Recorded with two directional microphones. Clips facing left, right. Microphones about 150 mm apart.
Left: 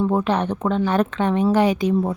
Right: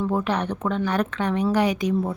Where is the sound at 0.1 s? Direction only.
25° left (ahead or behind).